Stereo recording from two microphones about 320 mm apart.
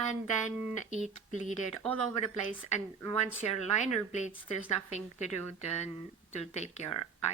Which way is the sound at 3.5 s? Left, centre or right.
Left.